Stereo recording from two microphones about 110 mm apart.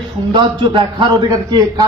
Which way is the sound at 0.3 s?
45° right (ahead or behind).